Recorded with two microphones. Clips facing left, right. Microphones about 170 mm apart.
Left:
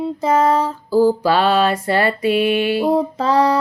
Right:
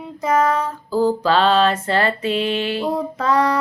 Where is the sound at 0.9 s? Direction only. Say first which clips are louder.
Left 3 dB; 10° left (ahead or behind).